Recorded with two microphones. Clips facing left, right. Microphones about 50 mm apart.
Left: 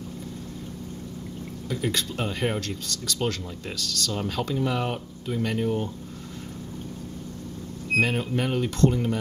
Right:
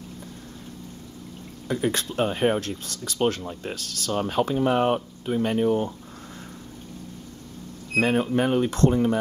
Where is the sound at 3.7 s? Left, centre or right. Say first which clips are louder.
Left 3 dB; left.